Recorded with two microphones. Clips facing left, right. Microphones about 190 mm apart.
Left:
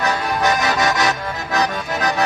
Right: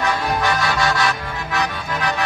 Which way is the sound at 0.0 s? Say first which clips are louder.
Left 1 dB; 40° left (ahead or behind).